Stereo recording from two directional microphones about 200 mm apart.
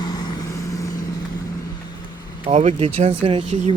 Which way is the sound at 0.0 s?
20° left (ahead or behind).